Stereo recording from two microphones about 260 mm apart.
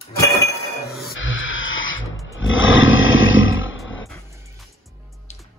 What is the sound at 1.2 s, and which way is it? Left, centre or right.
Wild animals, left.